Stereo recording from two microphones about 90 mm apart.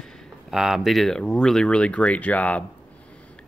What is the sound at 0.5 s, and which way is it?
Speech, 5° right (ahead or behind).